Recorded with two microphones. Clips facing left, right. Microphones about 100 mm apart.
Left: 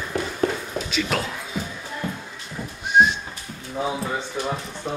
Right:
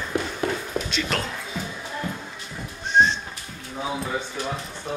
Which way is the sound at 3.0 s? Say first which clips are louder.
Left 2 dB; 10° left (ahead or behind).